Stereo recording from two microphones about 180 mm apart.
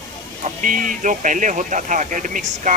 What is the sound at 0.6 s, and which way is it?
Speech, 50° right (ahead or behind).